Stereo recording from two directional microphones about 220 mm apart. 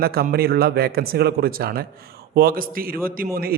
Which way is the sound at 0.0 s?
45° right (ahead or behind).